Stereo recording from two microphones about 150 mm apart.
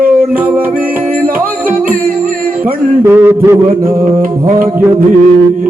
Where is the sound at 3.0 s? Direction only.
15° right (ahead or behind).